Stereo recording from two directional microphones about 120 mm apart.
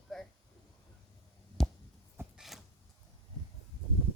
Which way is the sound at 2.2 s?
20° right (ahead or behind).